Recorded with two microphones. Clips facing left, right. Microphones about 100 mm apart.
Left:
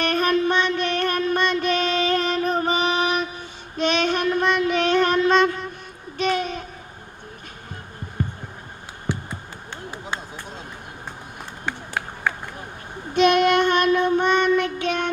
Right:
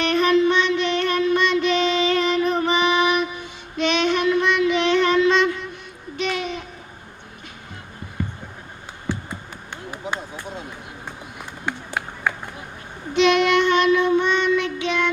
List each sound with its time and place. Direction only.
0.0 s music: 45° left (ahead or behind)
6.1 s a sound: 40° left (ahead or behind)
11.6 s run: 5° right (ahead or behind)
13.1 s child singing: 45° left (ahead or behind)